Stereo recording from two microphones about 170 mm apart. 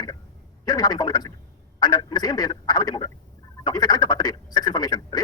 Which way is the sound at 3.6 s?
25° left (ahead or behind).